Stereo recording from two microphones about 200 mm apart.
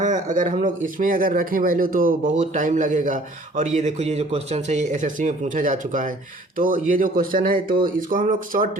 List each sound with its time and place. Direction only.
0.0 s speech: 40° right (ahead or behind)